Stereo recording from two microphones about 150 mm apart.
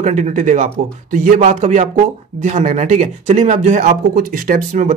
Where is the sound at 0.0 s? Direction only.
50° right (ahead or behind).